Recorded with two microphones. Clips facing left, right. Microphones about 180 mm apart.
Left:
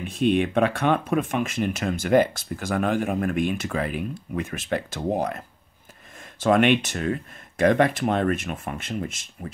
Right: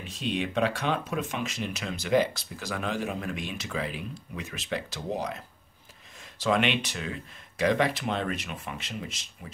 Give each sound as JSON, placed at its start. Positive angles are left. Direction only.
{"t": 0.0, "sound": "speech", "side_deg": 55}
{"t": 6.4, "sound": "speech", "side_deg": 50}